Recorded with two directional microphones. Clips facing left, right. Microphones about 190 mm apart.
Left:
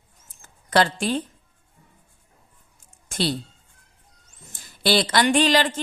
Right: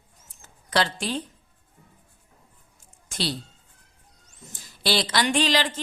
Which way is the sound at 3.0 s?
50° left (ahead or behind).